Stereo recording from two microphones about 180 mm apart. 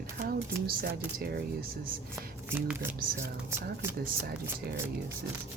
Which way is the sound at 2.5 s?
10° right (ahead or behind).